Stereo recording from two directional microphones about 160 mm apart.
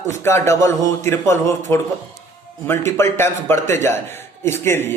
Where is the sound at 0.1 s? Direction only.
15° left (ahead or behind).